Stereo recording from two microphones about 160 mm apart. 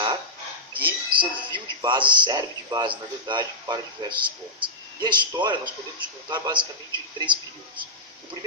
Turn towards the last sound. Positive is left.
turn(degrees=-30)  # may be behind; listen again after turning